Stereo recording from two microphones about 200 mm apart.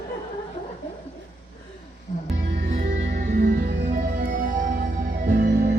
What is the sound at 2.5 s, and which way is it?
Music, 45° right (ahead or behind).